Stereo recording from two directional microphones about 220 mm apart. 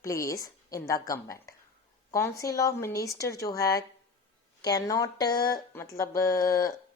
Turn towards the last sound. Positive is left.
turn(degrees=15)  # may be behind; listen again after turning